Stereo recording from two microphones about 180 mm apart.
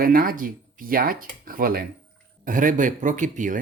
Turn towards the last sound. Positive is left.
turn(degrees=-45)  # may be behind; listen again after turning